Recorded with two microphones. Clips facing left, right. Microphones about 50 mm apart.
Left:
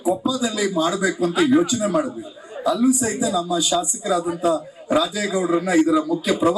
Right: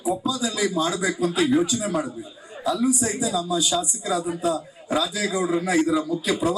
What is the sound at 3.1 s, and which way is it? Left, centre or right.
A man's voice, centre.